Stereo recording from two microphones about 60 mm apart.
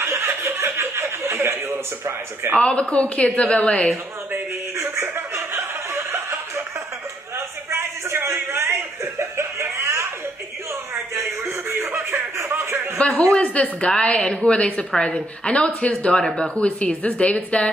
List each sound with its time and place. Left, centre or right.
0.0 s chuckle: right
2.5 s a woman's voice: centre
4.7 s chuckle: right
7.3 s a sound: right
11.1 s a sound: right
13.3 s a woman's voice: centre